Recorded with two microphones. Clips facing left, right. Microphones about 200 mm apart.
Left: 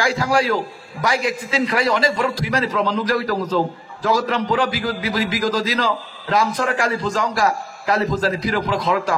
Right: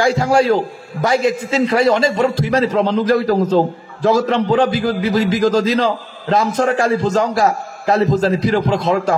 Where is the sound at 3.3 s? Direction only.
55° right (ahead or behind).